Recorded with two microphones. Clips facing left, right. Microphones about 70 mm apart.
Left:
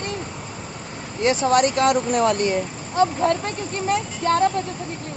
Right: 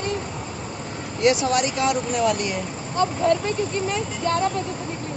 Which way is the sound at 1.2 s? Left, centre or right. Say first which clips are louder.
Left 1 dB; left.